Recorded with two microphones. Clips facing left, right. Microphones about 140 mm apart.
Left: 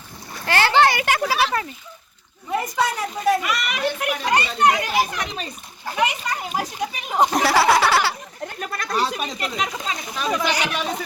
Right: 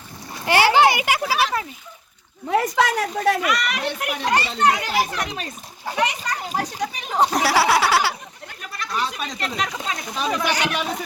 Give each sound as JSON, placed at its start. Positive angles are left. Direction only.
{"t": 0.4, "sound": "splash", "side_deg": -15}
{"t": 2.5, "sound": "a woman's voice", "side_deg": -90}
{"t": 3.4, "sound": "speech", "side_deg": 5}
{"t": 4.4, "sound": "a child's voice", "side_deg": 15}
{"t": 5.1, "sound": "a child's voice", "side_deg": -5}
{"t": 7.3, "sound": "a sound", "side_deg": -10}
{"t": 8.7, "sound": "a sound", "side_deg": 45}
{"t": 9.4, "sound": "a child's voice", "side_deg": 10}
{"t": 10.6, "sound": "speech", "side_deg": -15}